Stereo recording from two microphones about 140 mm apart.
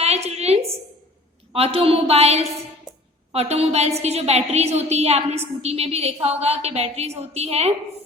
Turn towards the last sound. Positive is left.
turn(degrees=-45)  # may be behind; listen again after turning